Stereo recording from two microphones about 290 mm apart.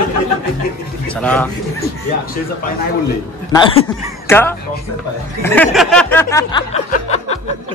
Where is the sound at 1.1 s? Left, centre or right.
Centre.